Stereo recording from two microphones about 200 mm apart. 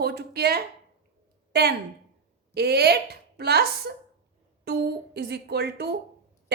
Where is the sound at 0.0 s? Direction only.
50° right (ahead or behind).